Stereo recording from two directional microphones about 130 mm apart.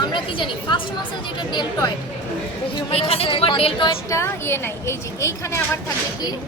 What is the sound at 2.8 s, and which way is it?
A woman's voice, 45° left (ahead or behind).